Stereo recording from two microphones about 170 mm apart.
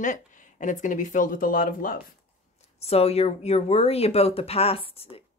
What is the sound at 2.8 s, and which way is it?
Speech, 35° left (ahead or behind).